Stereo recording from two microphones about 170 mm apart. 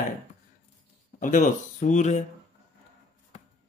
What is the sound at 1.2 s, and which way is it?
Speech, 50° left (ahead or behind).